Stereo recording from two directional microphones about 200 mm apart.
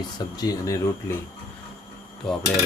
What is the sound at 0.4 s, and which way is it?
Speech, 15° left (ahead or behind).